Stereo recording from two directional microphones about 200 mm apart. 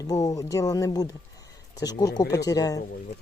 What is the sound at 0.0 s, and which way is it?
Speech, 20° left (ahead or behind).